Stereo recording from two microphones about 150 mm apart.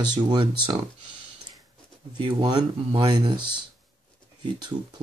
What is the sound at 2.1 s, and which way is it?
Speech, 30° right (ahead or behind).